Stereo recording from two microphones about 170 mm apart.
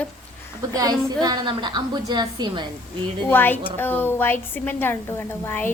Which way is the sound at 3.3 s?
10° left (ahead or behind).